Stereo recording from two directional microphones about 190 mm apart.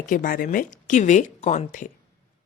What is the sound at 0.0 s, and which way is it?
Speech, 45° left (ahead or behind).